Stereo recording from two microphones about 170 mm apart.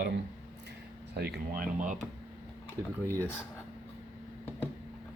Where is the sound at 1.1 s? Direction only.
70° right (ahead or behind); by 2.0 s 55° right (ahead or behind).